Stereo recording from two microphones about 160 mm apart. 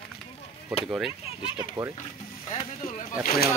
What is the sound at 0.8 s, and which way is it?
Speech, 5° right (ahead or behind).